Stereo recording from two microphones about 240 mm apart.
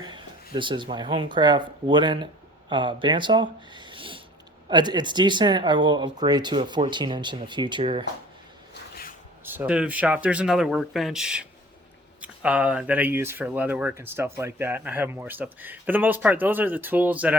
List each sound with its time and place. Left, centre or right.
0.0 s speech: centre
8.7 s a sound: left
9.4 s speech: centre